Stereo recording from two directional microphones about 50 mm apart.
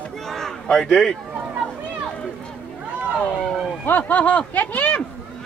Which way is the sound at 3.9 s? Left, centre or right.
Left.